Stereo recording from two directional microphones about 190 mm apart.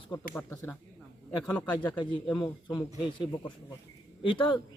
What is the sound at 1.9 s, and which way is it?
Speech, 20° left (ahead or behind).